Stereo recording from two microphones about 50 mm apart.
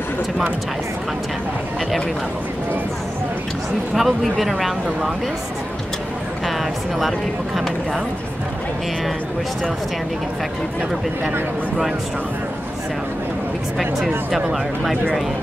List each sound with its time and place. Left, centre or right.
3.9 s speech: centre
7.0 s speech: centre
13.7 s speech: centre